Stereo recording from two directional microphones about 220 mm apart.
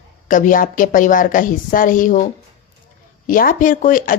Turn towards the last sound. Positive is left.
turn(degrees=40)  # may be behind; listen again after turning